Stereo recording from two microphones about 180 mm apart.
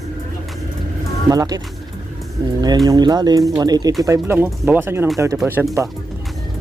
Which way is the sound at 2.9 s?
20° right (ahead or behind).